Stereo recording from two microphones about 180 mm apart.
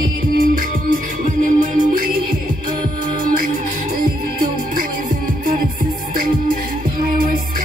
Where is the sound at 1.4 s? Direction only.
50° right (ahead or behind).